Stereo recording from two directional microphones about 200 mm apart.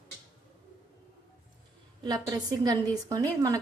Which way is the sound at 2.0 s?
20° right (ahead or behind).